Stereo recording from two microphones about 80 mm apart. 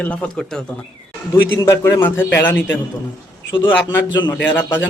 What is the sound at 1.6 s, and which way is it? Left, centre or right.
A man's voice, left.